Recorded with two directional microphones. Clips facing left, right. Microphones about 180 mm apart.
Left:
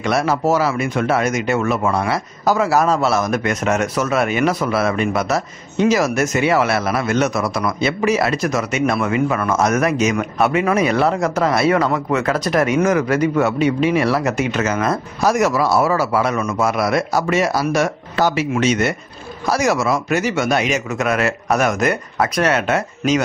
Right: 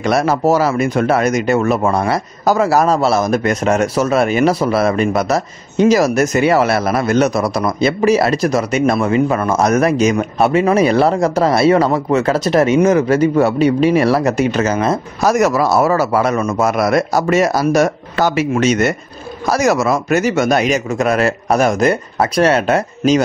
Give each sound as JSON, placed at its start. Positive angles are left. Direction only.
{"t": 0.0, "sound": "speech", "side_deg": -40}
{"t": 15.2, "sound": "a man's voice", "side_deg": -45}